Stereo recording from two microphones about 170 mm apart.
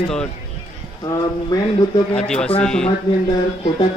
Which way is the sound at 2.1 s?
5° left (ahead or behind).